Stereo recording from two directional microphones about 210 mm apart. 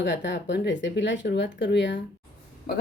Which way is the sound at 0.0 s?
55° left (ahead or behind).